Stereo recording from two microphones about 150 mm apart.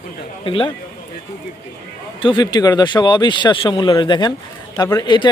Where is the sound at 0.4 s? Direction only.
35° left (ahead or behind).